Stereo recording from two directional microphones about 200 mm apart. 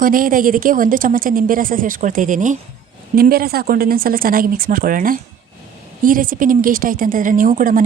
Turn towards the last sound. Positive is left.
turn(degrees=-40)  # may be behind; listen again after turning